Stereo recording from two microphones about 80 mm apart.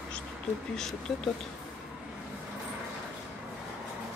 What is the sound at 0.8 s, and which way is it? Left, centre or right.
Speech, centre.